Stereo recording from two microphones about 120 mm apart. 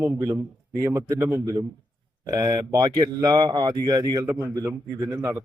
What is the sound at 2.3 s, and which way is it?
Speech, 35° right (ahead or behind).